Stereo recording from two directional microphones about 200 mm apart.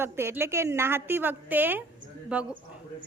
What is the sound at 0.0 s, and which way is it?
A woman's voice, 10° right (ahead or behind).